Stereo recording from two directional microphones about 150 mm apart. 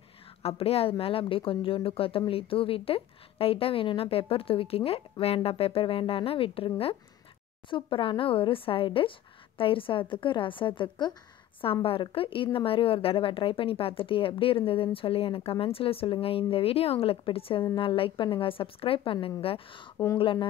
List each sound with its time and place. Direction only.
0.4 s speech: 40° left (ahead or behind)